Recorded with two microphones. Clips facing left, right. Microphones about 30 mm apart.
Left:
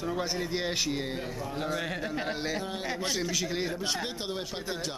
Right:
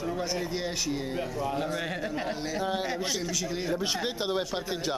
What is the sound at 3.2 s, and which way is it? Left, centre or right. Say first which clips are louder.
Speech: left 1 dB; centre.